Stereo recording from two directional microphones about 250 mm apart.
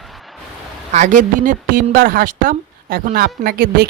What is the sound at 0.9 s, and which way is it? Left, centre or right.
A woman's voice, right.